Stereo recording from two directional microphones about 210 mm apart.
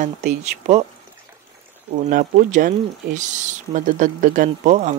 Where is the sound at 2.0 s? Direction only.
35° right (ahead or behind).